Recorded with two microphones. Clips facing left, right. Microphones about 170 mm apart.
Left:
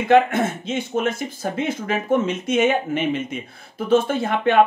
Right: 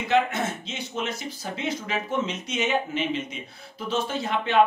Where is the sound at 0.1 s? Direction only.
50° left (ahead or behind).